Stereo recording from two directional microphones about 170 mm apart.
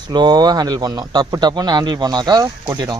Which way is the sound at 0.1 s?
25° right (ahead or behind).